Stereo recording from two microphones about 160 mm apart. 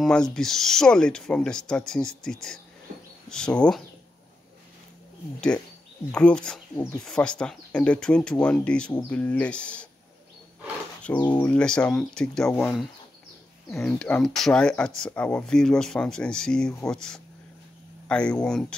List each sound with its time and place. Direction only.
0.0 s speech: 5° left (ahead or behind)
6.1 s speech: 5° left (ahead or behind)
11.1 s speech: 25° left (ahead or behind)
11.4 s speech: 5° left (ahead or behind)
13.7 s speech: 5° left (ahead or behind)